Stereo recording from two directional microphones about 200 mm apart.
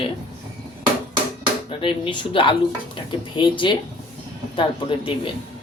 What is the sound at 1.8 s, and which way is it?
A man's voice, 25° left (ahead or behind).